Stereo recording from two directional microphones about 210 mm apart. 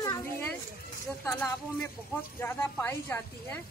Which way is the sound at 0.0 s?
20° left (ahead or behind).